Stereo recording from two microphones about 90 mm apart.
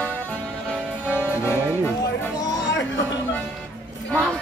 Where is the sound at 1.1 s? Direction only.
25° left (ahead or behind).